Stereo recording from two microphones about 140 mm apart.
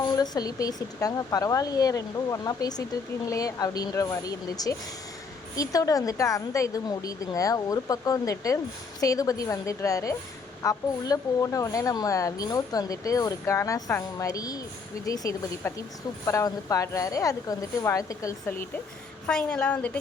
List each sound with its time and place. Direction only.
0.2 s speech: 25° left (ahead or behind)
19.3 s a woman's voice: 5° left (ahead or behind)